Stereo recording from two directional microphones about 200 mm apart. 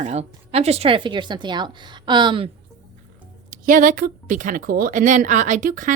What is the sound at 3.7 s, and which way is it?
A woman's voice, 45° right (ahead or behind).